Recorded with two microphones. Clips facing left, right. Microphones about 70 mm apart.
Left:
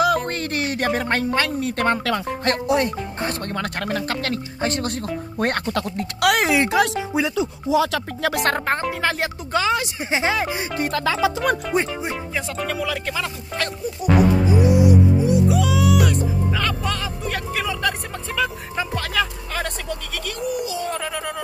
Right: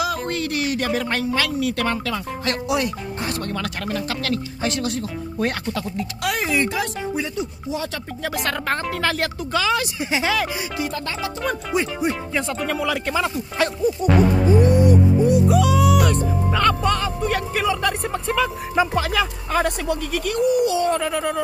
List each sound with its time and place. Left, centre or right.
0.0 s speech: left
2.0 s speech: left
8.5 s speech: left
10.9 s speech: left
12.4 s speech: centre
14.5 s speech: centre